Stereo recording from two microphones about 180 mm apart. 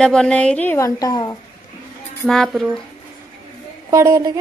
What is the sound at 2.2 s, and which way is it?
Speech, centre (ahead or behind).